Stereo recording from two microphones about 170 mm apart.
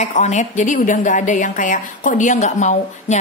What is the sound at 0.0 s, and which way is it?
Speech, 40° left (ahead or behind).